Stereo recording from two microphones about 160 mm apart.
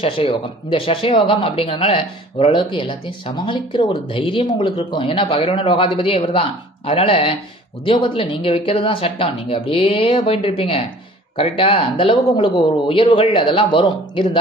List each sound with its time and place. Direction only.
0.0 s speech: 30° left (ahead or behind)